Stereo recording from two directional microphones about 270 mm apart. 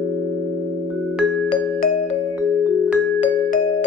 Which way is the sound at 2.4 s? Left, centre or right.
Centre.